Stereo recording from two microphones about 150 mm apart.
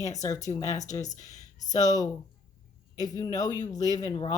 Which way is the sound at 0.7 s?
50° left (ahead or behind).